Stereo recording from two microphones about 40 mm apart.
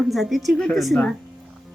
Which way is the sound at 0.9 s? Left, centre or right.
Left.